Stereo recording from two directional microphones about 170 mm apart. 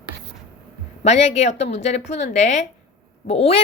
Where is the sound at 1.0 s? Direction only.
40° left (ahead or behind).